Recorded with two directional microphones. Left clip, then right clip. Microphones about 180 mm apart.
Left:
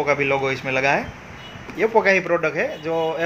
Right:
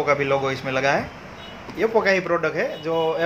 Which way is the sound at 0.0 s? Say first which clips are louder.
Left 1 dB; 10° left (ahead or behind).